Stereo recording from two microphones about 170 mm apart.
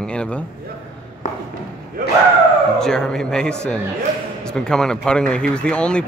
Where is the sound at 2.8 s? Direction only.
5° left (ahead or behind).